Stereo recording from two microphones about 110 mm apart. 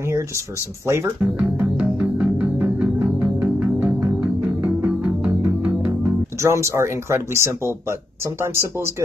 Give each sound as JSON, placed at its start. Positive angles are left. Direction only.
{"t": 0.8, "sound": "speech", "side_deg": -25}
{"t": 1.4, "sound": "music", "side_deg": -10}
{"t": 5.9, "sound": "music", "side_deg": -25}
{"t": 6.7, "sound": "speech", "side_deg": -25}